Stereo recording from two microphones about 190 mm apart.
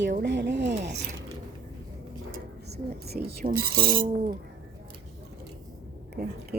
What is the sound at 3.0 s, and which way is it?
Speech, 55° right (ahead or behind).